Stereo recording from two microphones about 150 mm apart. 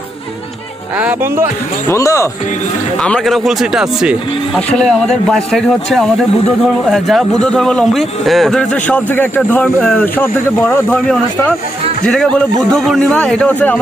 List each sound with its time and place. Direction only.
0.9 s speech: 10° right (ahead or behind)
1.9 s speech: 20° left (ahead or behind)
3.0 s a man's voice: 5° left (ahead or behind)